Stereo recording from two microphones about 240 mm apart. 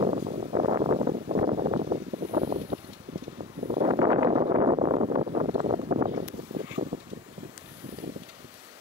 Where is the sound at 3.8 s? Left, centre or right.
Centre.